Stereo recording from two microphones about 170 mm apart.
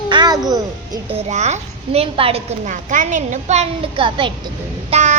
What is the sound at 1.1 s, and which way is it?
A woman's voice, 40° right (ahead or behind).